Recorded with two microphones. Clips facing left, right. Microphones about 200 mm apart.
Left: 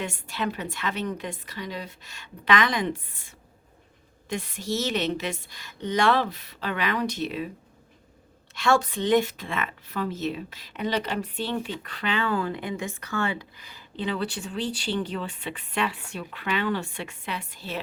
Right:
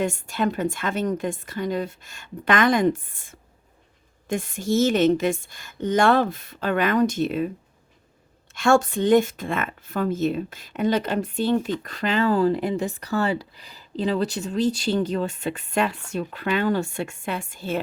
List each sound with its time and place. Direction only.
0.0 s speech: 45° right (ahead or behind)
8.5 s speech: 45° right (ahead or behind)